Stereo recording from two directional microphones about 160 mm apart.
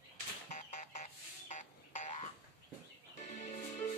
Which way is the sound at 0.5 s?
45° left (ahead or behind).